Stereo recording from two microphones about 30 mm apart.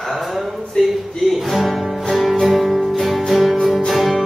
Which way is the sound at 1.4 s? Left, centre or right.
Centre.